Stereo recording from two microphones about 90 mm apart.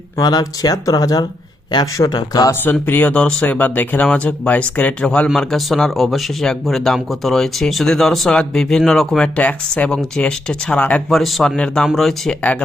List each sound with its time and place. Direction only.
0.2 s speech: 50° left (ahead or behind)
2.8 s speech: 20° left (ahead or behind)
11.1 s speech: centre (ahead or behind)